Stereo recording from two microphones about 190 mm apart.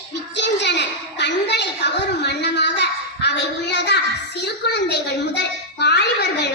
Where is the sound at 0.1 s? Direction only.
65° left (ahead or behind).